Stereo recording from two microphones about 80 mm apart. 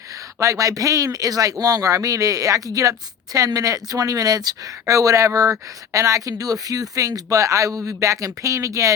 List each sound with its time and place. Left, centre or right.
0.1 s speech: right